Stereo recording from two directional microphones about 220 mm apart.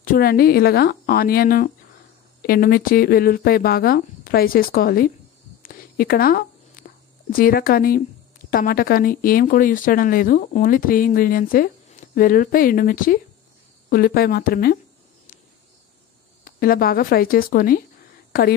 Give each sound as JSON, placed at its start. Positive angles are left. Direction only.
{"t": 0.0, "sound": "speech", "side_deg": 40}
{"t": 5.6, "sound": "a sound", "side_deg": 40}
{"t": 7.3, "sound": "speech", "side_deg": 40}
{"t": 16.4, "sound": "speech", "side_deg": 40}